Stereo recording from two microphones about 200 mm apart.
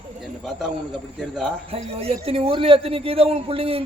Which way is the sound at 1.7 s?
30° right (ahead or behind).